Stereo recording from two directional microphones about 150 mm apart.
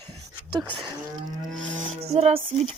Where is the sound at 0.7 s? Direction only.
30° right (ahead or behind).